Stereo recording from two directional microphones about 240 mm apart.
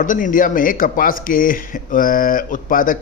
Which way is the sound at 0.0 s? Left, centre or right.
Left.